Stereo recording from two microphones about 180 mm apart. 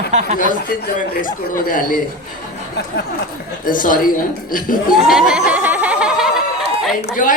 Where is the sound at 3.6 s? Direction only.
50° left (ahead or behind).